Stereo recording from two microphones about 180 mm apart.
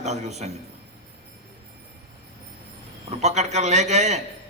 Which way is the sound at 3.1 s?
40° right (ahead or behind).